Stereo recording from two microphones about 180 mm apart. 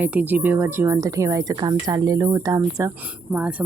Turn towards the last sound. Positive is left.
turn(degrees=-10)  # may be behind; listen again after turning